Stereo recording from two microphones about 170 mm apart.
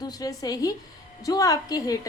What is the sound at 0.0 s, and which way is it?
A woman's voice, 20° left (ahead or behind).